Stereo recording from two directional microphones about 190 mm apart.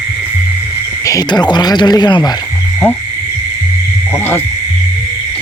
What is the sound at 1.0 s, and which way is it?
Speech, 20° left (ahead or behind).